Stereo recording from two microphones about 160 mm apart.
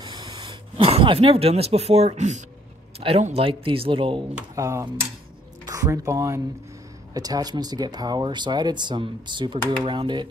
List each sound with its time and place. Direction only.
0.0 s a sound: 25° right (ahead or behind); by 2.4 s 45° right (ahead or behind)
3.0 s speech: 40° right (ahead or behind)
4.6 s speech: 20° right (ahead or behind)